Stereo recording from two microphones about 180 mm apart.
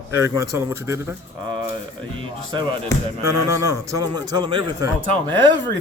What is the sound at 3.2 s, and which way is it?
A man's voice, 15° right (ahead or behind).